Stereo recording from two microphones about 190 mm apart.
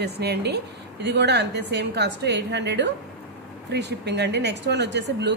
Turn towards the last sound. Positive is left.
turn(degrees=-65)  # may be behind; listen again after turning